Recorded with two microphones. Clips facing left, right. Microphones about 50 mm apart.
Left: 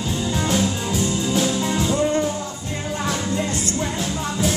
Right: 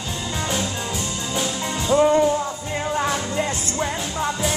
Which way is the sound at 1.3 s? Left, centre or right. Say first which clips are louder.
Left 3 dB; centre.